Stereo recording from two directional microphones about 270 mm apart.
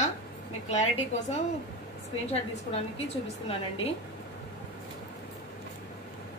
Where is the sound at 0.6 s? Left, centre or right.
Left.